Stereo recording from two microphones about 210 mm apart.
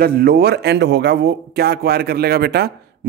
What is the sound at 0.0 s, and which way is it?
Speech, 45° right (ahead or behind).